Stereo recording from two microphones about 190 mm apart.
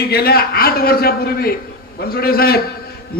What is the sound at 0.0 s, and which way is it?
A man's voice, 55° left (ahead or behind).